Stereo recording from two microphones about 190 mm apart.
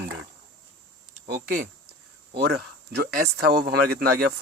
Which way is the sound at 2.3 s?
60° right (ahead or behind).